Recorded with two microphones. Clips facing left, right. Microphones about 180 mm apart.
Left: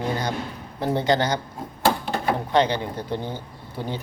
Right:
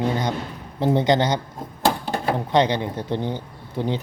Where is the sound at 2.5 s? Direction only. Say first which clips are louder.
Right 2 dB; 20° right (ahead or behind).